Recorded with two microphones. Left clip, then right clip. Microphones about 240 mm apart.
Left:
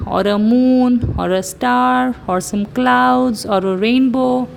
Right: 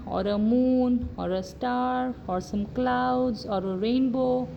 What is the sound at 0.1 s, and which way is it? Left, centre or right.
Speech, left.